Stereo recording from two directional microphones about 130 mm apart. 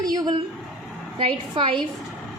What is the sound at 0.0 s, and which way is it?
Speech, 30° right (ahead or behind).